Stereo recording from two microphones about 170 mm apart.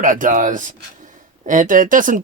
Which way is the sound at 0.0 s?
50° right (ahead or behind).